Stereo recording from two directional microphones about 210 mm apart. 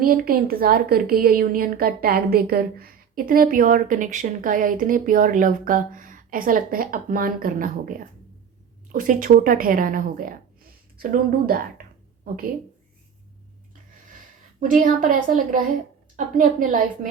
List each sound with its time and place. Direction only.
0.0 s a woman's voice: 45° right (ahead or behind)
14.6 s a woman's voice: 40° right (ahead or behind)